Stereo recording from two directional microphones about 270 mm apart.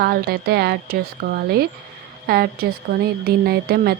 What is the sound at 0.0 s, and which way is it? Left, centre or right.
A woman's voice, right.